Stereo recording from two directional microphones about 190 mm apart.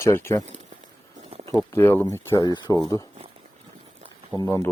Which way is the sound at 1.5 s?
15° left (ahead or behind).